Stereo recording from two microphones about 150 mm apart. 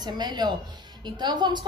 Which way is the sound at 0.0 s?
30° right (ahead or behind).